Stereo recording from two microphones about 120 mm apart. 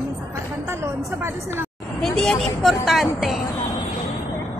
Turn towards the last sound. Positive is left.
turn(degrees=0)  # may be behind; listen again after turning